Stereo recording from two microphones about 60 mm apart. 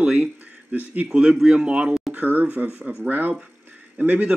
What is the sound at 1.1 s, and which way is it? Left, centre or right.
Speech, centre.